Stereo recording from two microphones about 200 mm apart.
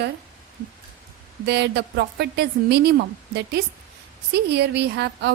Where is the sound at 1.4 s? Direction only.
55° right (ahead or behind).